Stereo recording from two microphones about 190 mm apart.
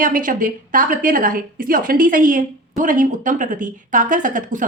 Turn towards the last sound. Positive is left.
turn(degrees=-45)  # may be behind; listen again after turning